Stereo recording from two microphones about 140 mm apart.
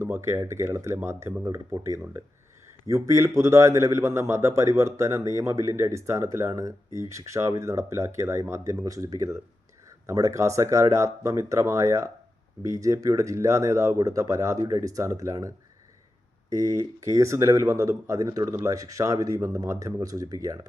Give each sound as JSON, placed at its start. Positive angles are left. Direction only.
{"t": 0.0, "sound": "a man's voice", "side_deg": -20}
{"t": 16.6, "sound": "a man's voice", "side_deg": -25}